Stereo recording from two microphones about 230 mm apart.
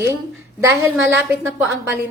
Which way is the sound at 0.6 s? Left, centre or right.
Centre.